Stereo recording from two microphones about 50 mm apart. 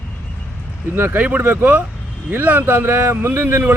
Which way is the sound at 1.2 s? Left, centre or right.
Right.